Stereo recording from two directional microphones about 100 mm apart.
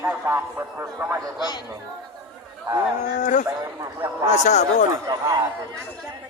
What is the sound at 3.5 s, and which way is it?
Speech, 35° right (ahead or behind).